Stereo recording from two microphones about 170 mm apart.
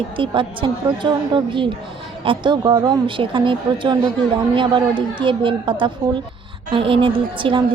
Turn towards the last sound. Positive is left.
turn(degrees=-30)  # may be behind; listen again after turning